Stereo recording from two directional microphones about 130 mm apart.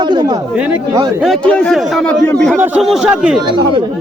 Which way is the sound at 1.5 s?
10° left (ahead or behind).